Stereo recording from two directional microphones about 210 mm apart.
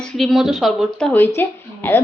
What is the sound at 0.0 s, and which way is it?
A woman's voice, centre (ahead or behind).